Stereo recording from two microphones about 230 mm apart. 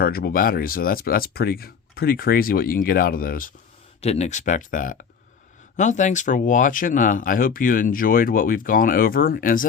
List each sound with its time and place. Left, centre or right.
0.0 s speech: left
4.0 s speech: left